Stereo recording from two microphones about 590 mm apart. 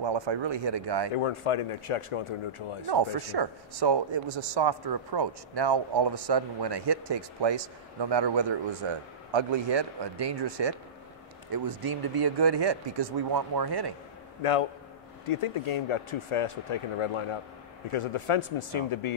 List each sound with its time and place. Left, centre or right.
0.0 s speech: right
1.1 s speech: left
2.9 s speech: right
14.4 s speech: left